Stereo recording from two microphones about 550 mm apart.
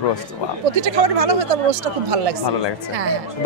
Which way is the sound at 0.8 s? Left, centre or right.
Right.